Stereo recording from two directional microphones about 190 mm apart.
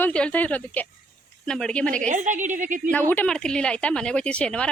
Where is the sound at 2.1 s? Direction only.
40° right (ahead or behind).